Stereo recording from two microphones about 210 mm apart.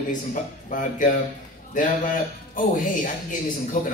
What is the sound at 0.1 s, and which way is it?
A man's voice, 40° left (ahead or behind).